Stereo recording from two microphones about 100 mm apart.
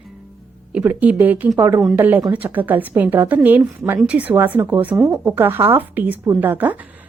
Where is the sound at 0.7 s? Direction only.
15° right (ahead or behind).